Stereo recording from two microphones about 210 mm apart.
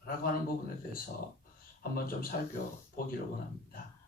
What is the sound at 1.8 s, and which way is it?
Speech, 45° left (ahead or behind).